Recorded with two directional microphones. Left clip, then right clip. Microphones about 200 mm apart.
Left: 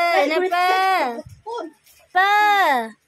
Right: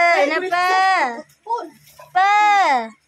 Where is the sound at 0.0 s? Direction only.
10° left (ahead or behind).